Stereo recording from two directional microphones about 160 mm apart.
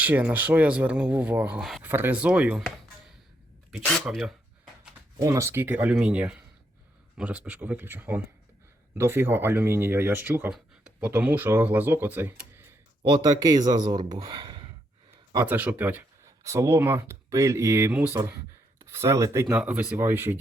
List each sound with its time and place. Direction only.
0.0 s speech: 10° right (ahead or behind)
5.2 s speech: 20° right (ahead or behind)
13.0 s speech: 25° right (ahead or behind)
15.1 s a sound: 25° right (ahead or behind)
15.4 s speech: 10° right (ahead or behind)